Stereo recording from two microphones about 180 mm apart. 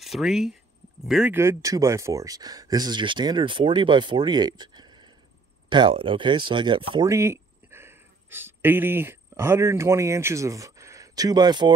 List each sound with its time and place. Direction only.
0.0 s speech: centre (ahead or behind)
1.3 s speech: 15° right (ahead or behind)
7.1 s speech: 15° right (ahead or behind)